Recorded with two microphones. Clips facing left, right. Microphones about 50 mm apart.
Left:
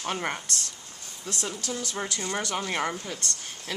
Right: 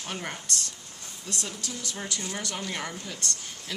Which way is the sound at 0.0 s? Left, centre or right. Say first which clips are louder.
Left 5 dB; left.